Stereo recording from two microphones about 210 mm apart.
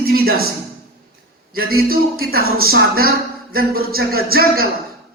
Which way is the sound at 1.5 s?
45° right (ahead or behind).